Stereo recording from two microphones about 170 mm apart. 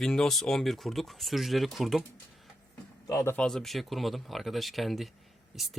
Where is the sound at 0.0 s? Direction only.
5° left (ahead or behind).